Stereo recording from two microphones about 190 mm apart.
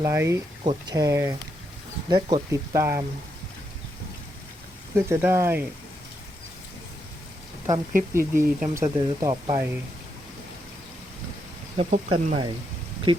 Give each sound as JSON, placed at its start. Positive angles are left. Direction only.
{"t": 0.0, "sound": "speech", "side_deg": -15}
{"t": 0.6, "sound": "speech", "side_deg": -30}
{"t": 0.9, "sound": "speech", "side_deg": -15}
{"t": 4.9, "sound": "speech", "side_deg": -15}
{"t": 8.1, "sound": "speech", "side_deg": -15}
{"t": 11.8, "sound": "speech", "side_deg": -40}
{"t": 13.1, "sound": "speech", "side_deg": -25}